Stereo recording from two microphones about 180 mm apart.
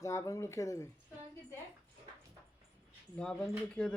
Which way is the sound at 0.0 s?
15° left (ahead or behind).